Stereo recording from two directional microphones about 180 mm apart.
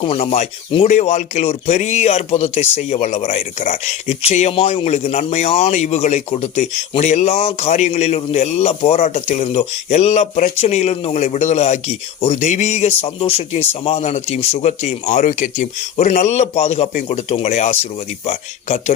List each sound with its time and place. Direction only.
0.0 s speech: 35° left (ahead or behind)